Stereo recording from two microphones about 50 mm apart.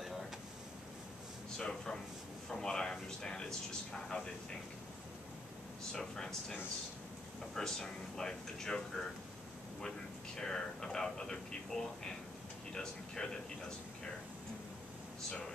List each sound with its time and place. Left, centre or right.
1.6 s a sound: centre
2.5 s speech: centre
5.9 s speech: centre
7.5 s speech: centre